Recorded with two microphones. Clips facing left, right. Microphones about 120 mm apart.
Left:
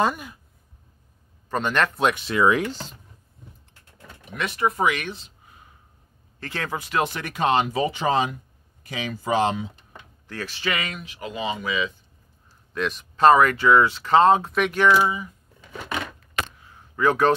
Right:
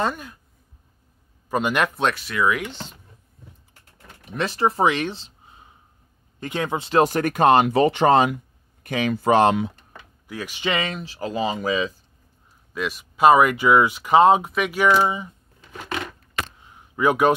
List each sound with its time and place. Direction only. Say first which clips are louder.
0.0 s speech: left 2 dB; 5° left (ahead or behind)
1.5 s speech: right 1 dB; 10° right (ahead or behind)
2.1 s speech: left 3 dB; 25° left (ahead or behind)
4.3 s speech: right 3 dB; 30° right (ahead or behind); by 9.7 s 60° right (ahead or behind)
10.2 s speech: right 2 dB; 15° right (ahead or behind)
10.7 s speech: right 5 dB; 30° right (ahead or behind)
12.7 s speech: left 1 dB; 5° right (ahead or behind)
14.5 s speech: even; 5° right (ahead or behind)
15.0 s speech: right 1 dB; 25° right (ahead or behind)
16.5 s a sound: right 1 dB; 20° right (ahead or behind)